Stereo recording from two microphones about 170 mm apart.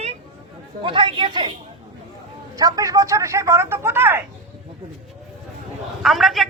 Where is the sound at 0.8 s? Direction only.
30° right (ahead or behind).